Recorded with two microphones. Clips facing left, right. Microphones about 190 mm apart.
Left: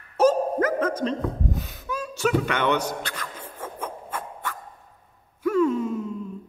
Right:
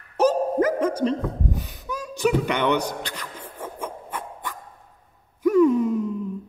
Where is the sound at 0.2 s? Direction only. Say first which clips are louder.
Even; 15° right (ahead or behind).